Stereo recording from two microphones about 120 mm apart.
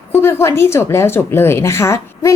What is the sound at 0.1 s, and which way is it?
A woman's voice, 20° left (ahead or behind).